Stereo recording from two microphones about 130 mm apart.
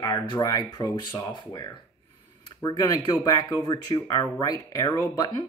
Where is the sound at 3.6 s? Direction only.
25° left (ahead or behind).